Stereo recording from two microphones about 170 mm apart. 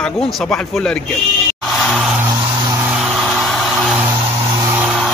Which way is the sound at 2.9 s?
Centre (ahead or behind).